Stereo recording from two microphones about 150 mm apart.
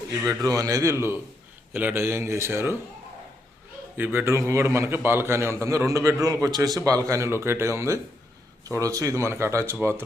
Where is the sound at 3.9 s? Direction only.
10° right (ahead or behind).